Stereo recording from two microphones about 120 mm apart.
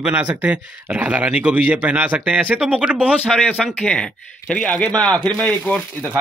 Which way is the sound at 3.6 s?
10° left (ahead or behind).